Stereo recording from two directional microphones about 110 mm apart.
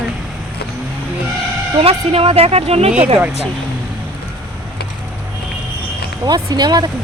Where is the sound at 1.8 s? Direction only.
60° right (ahead or behind).